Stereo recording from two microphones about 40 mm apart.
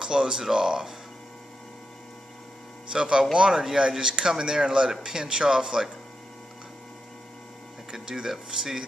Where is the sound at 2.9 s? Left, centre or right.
Centre.